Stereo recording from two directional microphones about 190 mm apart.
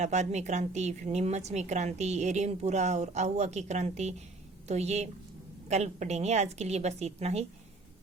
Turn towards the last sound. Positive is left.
turn(degrees=-35)  # may be behind; listen again after turning